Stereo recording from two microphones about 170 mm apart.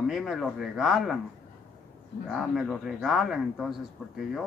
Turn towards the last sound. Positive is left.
turn(degrees=0)  # may be behind; listen again after turning